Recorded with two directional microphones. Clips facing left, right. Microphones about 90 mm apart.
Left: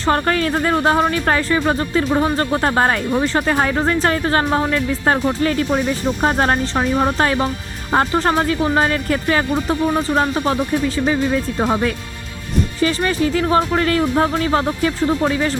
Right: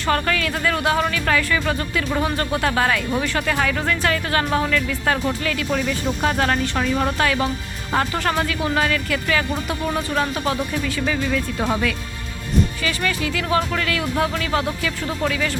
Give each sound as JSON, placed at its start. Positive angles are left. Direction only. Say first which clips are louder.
{"t": 0.1, "sound": "speech", "louder": "left 4 dB", "side_deg": 35}
{"t": 12.8, "sound": "speech", "louder": "left 6 dB", "side_deg": 35}